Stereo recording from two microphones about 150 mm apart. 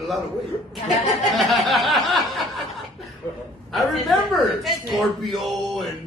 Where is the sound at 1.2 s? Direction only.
Centre (ahead or behind).